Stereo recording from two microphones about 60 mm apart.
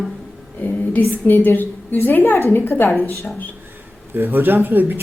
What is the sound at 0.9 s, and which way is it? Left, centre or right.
A woman's voice, left.